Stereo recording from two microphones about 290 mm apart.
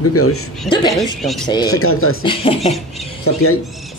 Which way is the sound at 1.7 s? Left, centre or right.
Left.